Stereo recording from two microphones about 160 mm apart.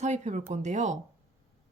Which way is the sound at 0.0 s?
45° right (ahead or behind).